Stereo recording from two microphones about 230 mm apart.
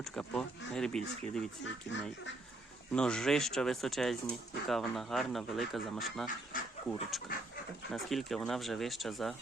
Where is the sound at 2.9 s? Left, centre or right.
Centre.